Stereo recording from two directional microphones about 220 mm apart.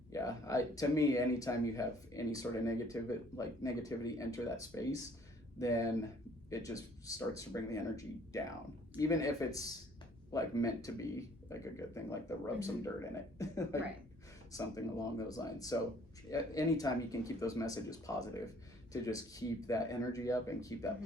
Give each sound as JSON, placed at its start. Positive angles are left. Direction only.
{"t": 0.1, "sound": "speech", "side_deg": 15}